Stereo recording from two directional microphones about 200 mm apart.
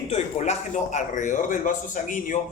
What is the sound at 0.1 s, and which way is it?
A man's voice, 35° left (ahead or behind).